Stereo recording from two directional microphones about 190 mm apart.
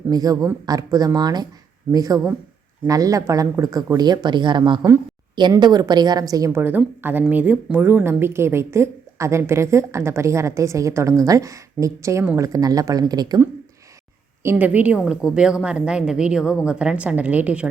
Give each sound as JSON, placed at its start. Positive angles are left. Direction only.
{"t": 0.1, "sound": "a woman's voice", "side_deg": -20}
{"t": 14.4, "sound": "a woman's voice", "side_deg": -10}